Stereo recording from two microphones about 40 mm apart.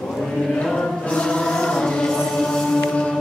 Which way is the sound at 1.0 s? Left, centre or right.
Left.